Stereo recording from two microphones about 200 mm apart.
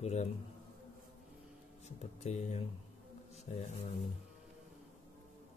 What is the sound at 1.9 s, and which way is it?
Speech, 35° left (ahead or behind).